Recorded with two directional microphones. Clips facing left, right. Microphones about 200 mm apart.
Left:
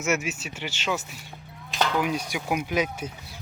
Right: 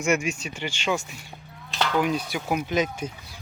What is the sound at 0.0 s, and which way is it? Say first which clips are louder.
Speech: right 3 dB; 5° left (ahead or behind).